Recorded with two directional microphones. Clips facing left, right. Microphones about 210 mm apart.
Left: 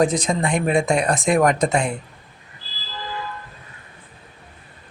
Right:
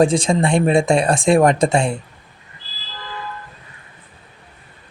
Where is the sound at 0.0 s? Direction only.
30° right (ahead or behind).